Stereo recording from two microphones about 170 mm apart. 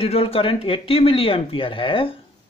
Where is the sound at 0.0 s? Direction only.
35° left (ahead or behind).